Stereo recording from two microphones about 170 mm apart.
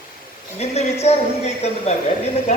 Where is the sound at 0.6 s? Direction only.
40° left (ahead or behind).